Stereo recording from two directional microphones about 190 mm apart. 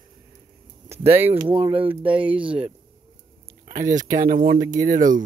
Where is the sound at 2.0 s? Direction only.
5° right (ahead or behind).